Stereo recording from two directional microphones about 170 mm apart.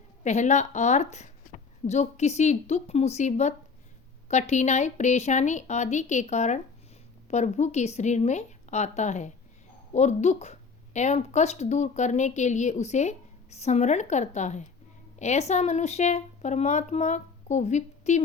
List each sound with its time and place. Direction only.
0.3 s a woman's voice: 45° left (ahead or behind)